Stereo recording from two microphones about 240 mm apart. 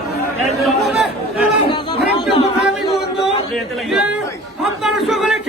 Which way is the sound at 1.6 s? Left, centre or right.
Left.